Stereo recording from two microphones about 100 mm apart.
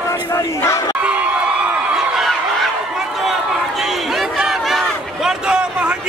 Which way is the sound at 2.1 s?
Centre (ahead or behind).